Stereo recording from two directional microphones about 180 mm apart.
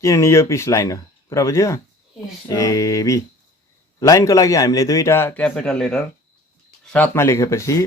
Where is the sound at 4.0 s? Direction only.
20° left (ahead or behind).